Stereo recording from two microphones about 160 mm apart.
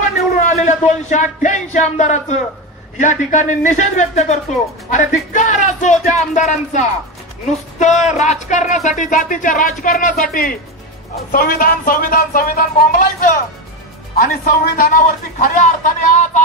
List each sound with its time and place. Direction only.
0.0 s speech: 50° left (ahead or behind)
14.1 s speech: 65° left (ahead or behind)